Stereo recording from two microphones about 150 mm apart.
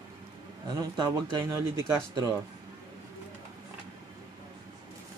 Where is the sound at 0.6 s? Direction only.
25° right (ahead or behind).